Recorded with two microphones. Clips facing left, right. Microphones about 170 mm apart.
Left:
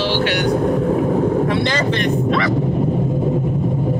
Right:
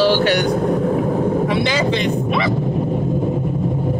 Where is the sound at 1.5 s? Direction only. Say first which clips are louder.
Even; 10° right (ahead or behind).